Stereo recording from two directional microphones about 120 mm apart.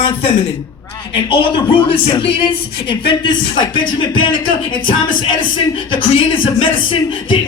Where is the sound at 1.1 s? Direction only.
45° left (ahead or behind).